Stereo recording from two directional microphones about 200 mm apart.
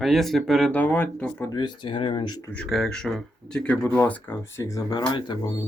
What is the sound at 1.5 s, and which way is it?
Speech, 20° left (ahead or behind).